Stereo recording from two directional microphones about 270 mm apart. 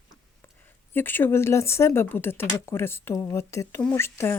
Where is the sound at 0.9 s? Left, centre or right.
Centre.